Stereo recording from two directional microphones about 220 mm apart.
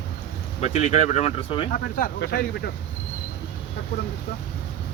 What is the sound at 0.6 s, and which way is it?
Speech, 30° left (ahead or behind).